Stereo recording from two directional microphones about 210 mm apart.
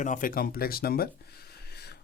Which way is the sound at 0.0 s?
40° left (ahead or behind).